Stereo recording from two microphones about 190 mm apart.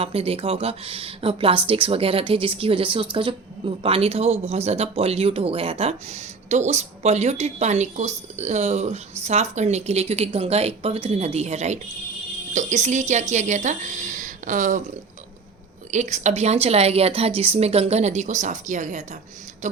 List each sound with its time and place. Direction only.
0.0 s speech: 30° right (ahead or behind)
15.9 s speech: 35° right (ahead or behind)